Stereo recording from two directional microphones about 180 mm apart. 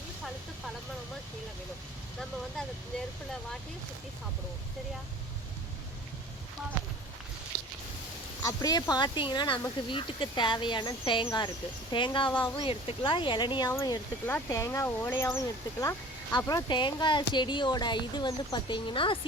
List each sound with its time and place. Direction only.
8.4 s speech: 20° left (ahead or behind)